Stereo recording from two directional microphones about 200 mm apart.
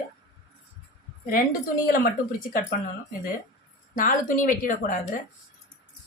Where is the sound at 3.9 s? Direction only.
40° left (ahead or behind).